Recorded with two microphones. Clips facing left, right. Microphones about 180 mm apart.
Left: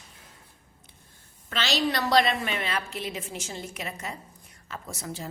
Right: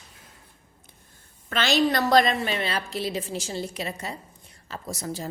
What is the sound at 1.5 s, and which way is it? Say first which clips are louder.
Speech: right 5 dB; 50° right (ahead or behind).